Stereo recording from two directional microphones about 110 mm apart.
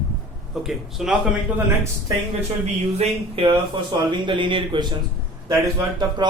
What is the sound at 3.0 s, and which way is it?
Speech, 55° right (ahead or behind).